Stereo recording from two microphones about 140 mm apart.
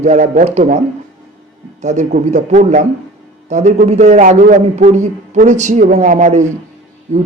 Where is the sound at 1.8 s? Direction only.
60° right (ahead or behind).